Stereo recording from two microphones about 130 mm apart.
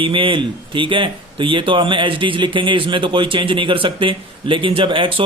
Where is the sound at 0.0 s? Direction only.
40° right (ahead or behind).